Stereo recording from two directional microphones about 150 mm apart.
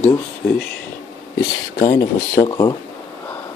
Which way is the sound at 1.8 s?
20° left (ahead or behind).